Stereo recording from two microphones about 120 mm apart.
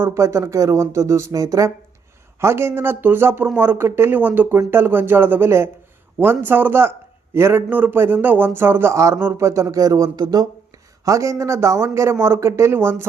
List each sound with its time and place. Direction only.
0.0 s speech: 25° right (ahead or behind)